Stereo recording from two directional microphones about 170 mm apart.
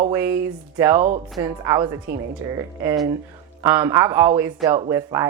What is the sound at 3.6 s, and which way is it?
Speech, 15° right (ahead or behind).